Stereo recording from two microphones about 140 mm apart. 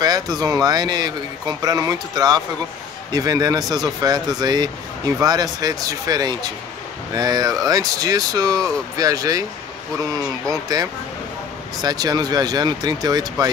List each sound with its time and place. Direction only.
0.0 s speech: 30° right (ahead or behind)
10.5 s speech: 25° right (ahead or behind)